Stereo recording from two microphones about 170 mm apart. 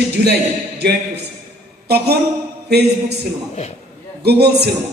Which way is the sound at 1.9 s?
70° right (ahead or behind).